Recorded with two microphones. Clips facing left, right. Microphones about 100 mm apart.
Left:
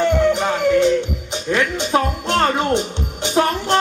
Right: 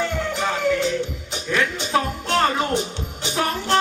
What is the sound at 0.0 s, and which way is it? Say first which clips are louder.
Music: left 8 dB; 20° left (ahead or behind).